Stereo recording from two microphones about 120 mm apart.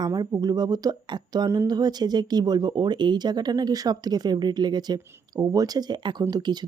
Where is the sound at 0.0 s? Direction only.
35° right (ahead or behind).